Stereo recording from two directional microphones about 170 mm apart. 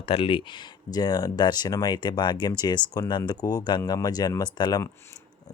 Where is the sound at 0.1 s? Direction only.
30° left (ahead or behind).